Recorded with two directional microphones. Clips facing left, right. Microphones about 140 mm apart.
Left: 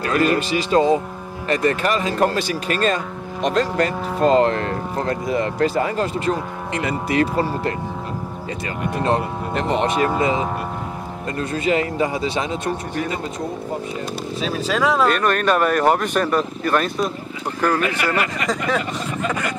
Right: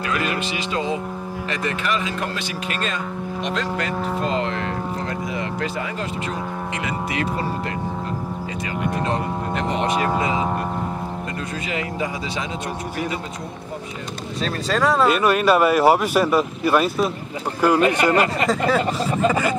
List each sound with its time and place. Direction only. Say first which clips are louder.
0.1 s cattle: left 8 dB; 40° left (ahead or behind)
1.5 s speech: left 6 dB; 40° left (ahead or behind)
3.4 s cattle: left 7 dB; 40° left (ahead or behind)
9.9 s speech: left 2 dB; 20° right (ahead or behind)
11.6 s cattle: left 8 dB; 40° left (ahead or behind)
14.4 s speech: even; centre (ahead or behind)
17.7 s speech: right 4 dB; 25° right (ahead or behind)